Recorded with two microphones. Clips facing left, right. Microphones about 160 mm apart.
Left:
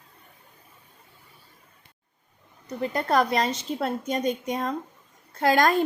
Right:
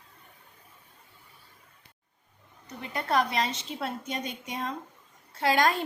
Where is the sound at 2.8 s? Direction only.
40° left (ahead or behind).